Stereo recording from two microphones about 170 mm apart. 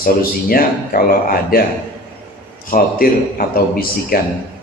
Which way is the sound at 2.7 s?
55° left (ahead or behind).